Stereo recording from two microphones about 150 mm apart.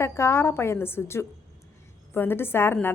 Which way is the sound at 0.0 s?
15° left (ahead or behind).